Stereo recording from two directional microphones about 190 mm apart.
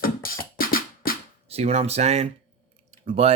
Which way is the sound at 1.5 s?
35° right (ahead or behind).